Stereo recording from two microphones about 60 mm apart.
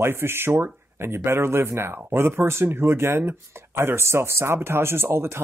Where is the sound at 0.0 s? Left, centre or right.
Right.